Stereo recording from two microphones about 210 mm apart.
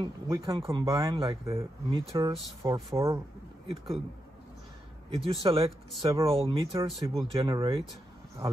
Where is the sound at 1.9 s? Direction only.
25° right (ahead or behind).